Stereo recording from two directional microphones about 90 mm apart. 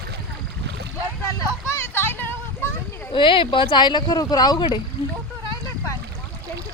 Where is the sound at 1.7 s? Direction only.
25° left (ahead or behind).